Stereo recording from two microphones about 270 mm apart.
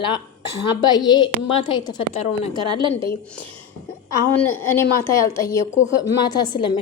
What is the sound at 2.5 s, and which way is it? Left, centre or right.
Speech, centre.